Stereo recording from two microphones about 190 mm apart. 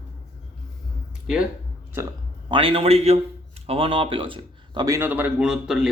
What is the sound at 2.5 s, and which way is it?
A man's voice, 30° right (ahead or behind).